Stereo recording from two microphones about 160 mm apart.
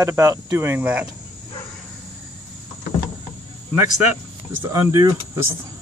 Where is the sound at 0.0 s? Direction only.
15° right (ahead or behind).